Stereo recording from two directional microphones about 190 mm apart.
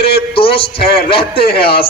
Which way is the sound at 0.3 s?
30° left (ahead or behind).